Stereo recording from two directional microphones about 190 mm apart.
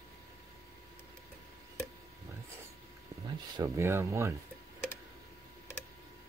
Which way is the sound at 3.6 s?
15° right (ahead or behind).